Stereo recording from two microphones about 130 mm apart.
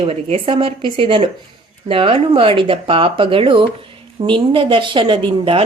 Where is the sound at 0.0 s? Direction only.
45° right (ahead or behind).